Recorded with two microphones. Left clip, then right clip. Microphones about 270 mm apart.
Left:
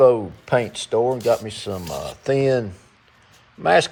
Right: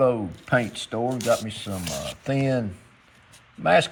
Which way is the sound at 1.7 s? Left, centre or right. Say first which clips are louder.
Left 3 dB; left.